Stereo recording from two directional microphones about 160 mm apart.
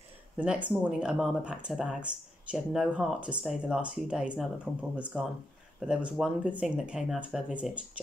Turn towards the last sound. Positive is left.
turn(degrees=-5)  # may be behind; listen again after turning